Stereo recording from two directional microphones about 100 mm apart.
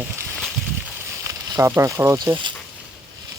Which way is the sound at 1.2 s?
35° right (ahead or behind).